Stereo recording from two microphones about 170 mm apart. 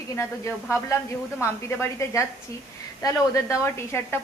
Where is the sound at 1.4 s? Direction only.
15° left (ahead or behind).